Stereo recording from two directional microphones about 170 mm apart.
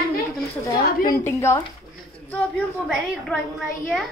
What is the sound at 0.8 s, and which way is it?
Speech, 60° left (ahead or behind).